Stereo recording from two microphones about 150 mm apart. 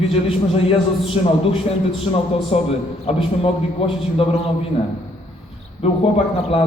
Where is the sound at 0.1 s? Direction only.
40° left (ahead or behind).